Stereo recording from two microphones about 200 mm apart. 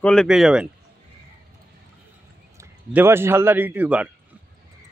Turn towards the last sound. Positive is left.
turn(degrees=-5)  # may be behind; listen again after turning